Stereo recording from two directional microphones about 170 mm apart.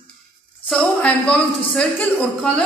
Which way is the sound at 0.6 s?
5° left (ahead or behind).